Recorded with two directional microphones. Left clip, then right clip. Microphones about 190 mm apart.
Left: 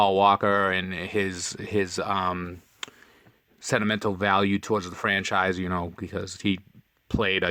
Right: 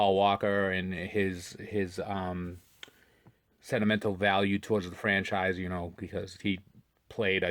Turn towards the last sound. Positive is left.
turn(degrees=25)  # may be behind; listen again after turning